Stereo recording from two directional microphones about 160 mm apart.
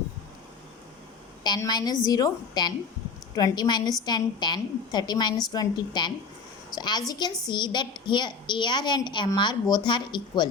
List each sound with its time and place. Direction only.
1.5 s a woman's voice: 25° left (ahead or behind)